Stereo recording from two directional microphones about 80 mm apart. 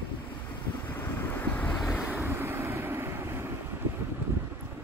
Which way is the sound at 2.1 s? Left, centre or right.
Right.